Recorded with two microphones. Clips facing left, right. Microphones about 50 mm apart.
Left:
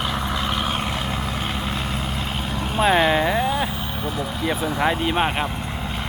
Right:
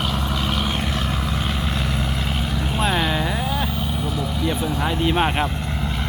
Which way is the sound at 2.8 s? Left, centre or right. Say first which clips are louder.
Left 5 dB; centre.